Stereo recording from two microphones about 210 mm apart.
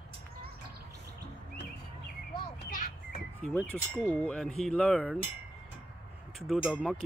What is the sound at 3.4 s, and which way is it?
Speech, 10° left (ahead or behind).